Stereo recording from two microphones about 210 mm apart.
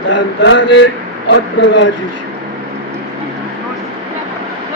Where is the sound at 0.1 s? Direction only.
60° left (ahead or behind).